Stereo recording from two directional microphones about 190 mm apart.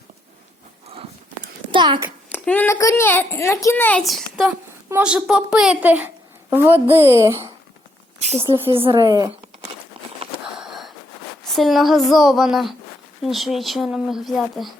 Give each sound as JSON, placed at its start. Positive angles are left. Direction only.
{"t": 1.7, "sound": "a child's voice", "side_deg": -25}
{"t": 2.3, "sound": "a child's voice", "side_deg": 10}
{"t": 8.7, "sound": "speech", "side_deg": -30}
{"t": 10.5, "sound": "sniff", "side_deg": 0}
{"t": 11.5, "sound": "speech", "side_deg": 0}